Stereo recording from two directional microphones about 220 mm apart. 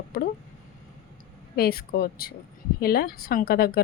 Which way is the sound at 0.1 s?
45° left (ahead or behind).